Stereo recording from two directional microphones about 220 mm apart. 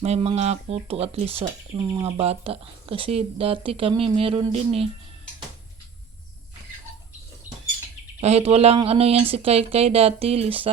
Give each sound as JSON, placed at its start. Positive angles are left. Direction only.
{"t": 0.0, "sound": "speech", "side_deg": -25}
{"t": 1.8, "sound": "speech", "side_deg": -15}
{"t": 2.0, "sound": "speech", "side_deg": -25}
{"t": 8.2, "sound": "speech", "side_deg": -30}